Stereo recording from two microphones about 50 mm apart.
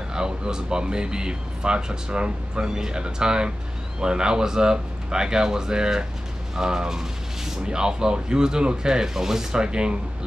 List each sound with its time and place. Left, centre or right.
0.1 s speech: centre